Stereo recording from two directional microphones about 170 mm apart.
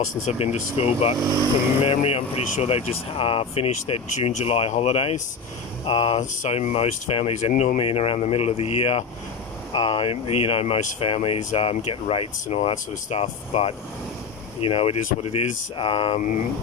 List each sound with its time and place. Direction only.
0.2 s speech: 40° left (ahead or behind)